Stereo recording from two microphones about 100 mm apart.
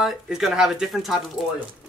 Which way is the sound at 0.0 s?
5° right (ahead or behind).